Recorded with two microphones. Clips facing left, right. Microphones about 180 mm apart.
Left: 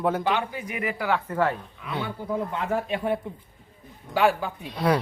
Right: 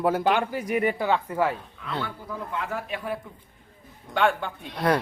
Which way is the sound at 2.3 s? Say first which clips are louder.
Left 5 dB; 25° left (ahead or behind).